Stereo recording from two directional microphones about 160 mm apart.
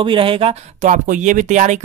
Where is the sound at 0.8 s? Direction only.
50° right (ahead or behind).